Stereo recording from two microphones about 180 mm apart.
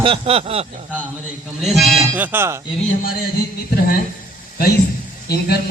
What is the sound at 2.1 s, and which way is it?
Speech, 10° right (ahead or behind).